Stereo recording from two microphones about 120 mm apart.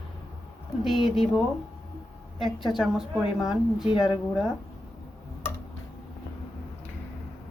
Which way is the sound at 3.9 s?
40° left (ahead or behind).